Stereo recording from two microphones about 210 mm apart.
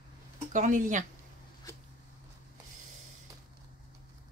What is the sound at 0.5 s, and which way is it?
Speech, 40° right (ahead or behind).